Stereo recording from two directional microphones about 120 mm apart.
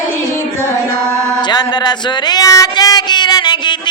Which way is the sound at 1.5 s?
35° left (ahead or behind).